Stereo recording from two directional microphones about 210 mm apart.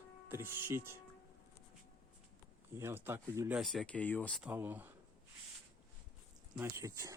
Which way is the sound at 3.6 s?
Centre (ahead or behind).